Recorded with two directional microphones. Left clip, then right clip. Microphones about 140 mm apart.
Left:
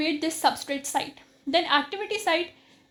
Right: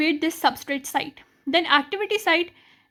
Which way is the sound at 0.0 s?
50° right (ahead or behind).